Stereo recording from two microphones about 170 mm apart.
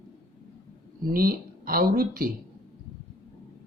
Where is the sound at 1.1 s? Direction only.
55° right (ahead or behind).